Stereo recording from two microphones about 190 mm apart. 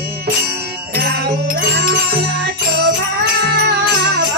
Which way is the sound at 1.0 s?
55° right (ahead or behind).